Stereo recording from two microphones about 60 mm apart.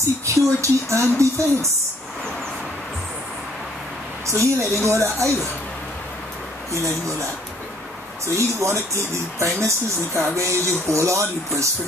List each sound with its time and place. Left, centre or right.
0.2 s speech: right
4.3 s speech: right
8.4 s speech: right